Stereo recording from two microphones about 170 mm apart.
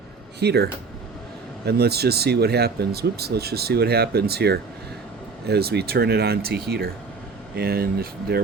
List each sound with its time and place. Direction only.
0.3 s speech: 75° right (ahead or behind)